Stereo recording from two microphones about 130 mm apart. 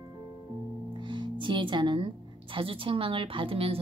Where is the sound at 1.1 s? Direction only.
40° right (ahead or behind).